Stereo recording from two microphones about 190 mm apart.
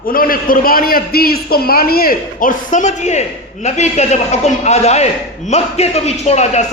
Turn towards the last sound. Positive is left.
turn(degrees=35)  # may be behind; listen again after turning